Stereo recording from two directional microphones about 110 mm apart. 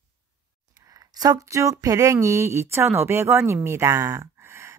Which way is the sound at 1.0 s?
35° right (ahead or behind).